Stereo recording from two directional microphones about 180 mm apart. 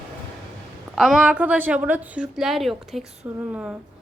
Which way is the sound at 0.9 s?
Centre (ahead or behind).